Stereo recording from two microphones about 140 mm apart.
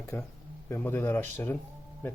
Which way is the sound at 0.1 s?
20° left (ahead or behind).